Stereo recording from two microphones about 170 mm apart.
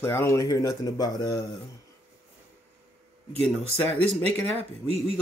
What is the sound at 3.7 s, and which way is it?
Speech, 35° right (ahead or behind).